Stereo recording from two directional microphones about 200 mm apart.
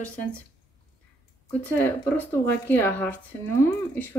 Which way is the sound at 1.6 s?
10° left (ahead or behind).